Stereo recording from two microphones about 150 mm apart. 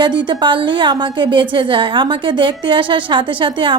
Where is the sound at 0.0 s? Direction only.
30° right (ahead or behind).